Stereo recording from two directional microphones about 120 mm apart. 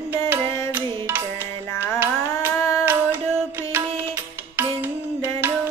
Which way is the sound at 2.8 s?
15° right (ahead or behind).